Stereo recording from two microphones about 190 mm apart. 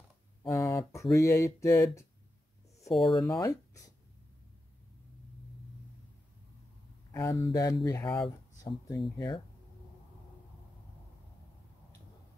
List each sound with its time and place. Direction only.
0.5 s speech: 15° left (ahead or behind)
1.1 s a sound: 15° left (ahead or behind)
2.9 s speech: centre (ahead or behind)
3.3 s speech: 15° left (ahead or behind)
7.1 s speech: 15° left (ahead or behind)